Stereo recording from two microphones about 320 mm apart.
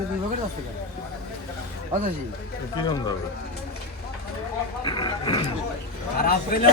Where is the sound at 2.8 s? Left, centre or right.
Centre.